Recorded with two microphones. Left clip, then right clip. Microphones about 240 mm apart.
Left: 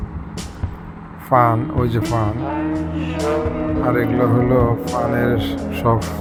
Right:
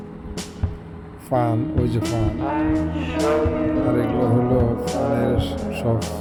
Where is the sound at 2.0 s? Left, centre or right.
Centre.